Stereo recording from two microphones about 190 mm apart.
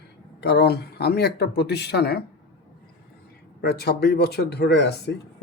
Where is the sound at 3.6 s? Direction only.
60° left (ahead or behind).